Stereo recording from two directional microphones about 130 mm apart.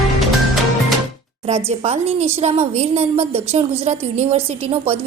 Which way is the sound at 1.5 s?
55° right (ahead or behind).